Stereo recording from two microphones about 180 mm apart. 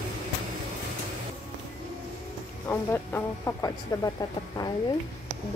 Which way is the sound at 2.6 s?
10° left (ahead or behind).